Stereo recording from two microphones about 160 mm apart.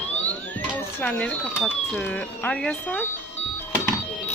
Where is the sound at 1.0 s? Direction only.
5° left (ahead or behind).